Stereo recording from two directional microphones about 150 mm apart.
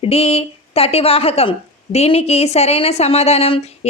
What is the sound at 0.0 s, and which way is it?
Speech, 40° left (ahead or behind).